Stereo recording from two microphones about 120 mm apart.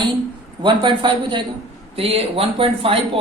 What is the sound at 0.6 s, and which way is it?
Speech, 40° right (ahead or behind).